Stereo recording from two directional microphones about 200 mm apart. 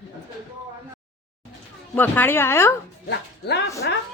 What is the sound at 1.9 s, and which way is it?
Speech, 10° left (ahead or behind).